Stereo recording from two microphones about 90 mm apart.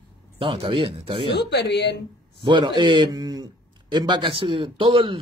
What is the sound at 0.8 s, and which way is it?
Speech, 65° right (ahead or behind).